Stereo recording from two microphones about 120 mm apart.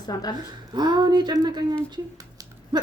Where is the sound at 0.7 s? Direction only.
35° right (ahead or behind).